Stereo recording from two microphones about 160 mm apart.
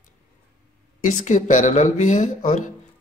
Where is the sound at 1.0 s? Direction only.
50° left (ahead or behind).